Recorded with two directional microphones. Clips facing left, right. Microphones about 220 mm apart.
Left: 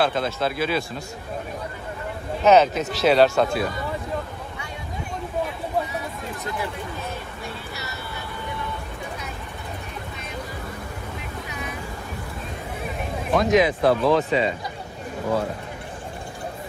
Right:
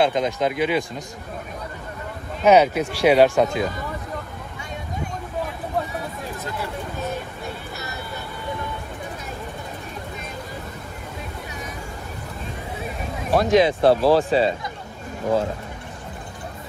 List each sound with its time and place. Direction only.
0.0 s speech: 15° right (ahead or behind)
2.4 s speech: 10° right (ahead or behind)
13.3 s speech: 30° right (ahead or behind)